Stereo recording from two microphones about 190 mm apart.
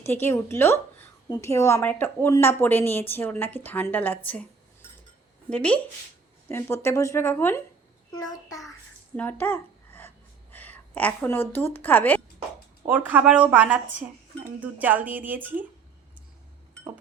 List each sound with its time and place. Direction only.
0.0 s a woman's voice: 10° left (ahead or behind)
9.1 s a sound: 10° left (ahead or behind)
10.5 s a woman's voice: 10° left (ahead or behind)
12.9 s speech: 10° right (ahead or behind)